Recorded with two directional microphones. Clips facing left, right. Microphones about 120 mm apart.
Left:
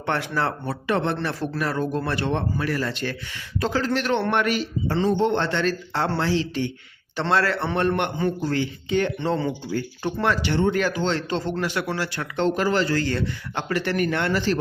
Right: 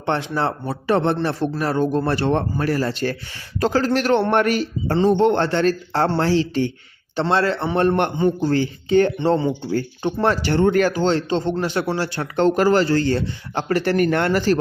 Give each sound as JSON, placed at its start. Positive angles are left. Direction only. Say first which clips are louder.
{"t": 0.0, "sound": "speech", "louder": "right 3 dB", "side_deg": -25}
{"t": 5.1, "sound": "speech", "louder": "right 5 dB", "side_deg": -60}
{"t": 5.4, "sound": "speech", "louder": "right 5 dB", "side_deg": -40}
{"t": 7.2, "sound": "speech", "louder": "right 3 dB", "side_deg": -25}
{"t": 7.8, "sound": "speech", "louder": "right 6 dB", "side_deg": -35}
{"t": 10.0, "sound": "speech", "louder": "right 4 dB", "side_deg": -25}
{"t": 10.2, "sound": "speech", "louder": "right 4 dB", "side_deg": -40}
{"t": 11.3, "sound": "speech", "louder": "right 4 dB", "side_deg": -25}
{"t": 12.4, "sound": "speech", "louder": "right 6 dB", "side_deg": -40}